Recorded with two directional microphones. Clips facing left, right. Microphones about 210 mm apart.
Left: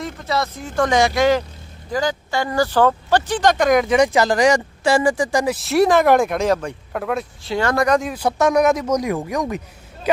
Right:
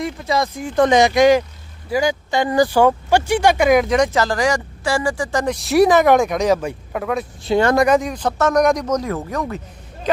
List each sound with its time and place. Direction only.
0.0 s speech: 15° right (ahead or behind)
7.5 s speech: 20° right (ahead or behind)
7.9 s speech: centre (ahead or behind)